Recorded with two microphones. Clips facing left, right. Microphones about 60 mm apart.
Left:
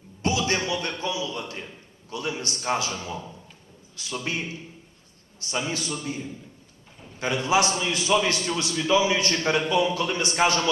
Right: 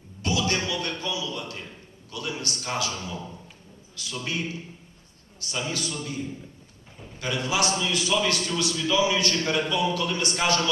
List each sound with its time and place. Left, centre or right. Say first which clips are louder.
0.2 s a sound: left 2 dB; left
2.0 s a man's voice: left 2 dB; left
7.2 s a man's voice: left 4 dB; left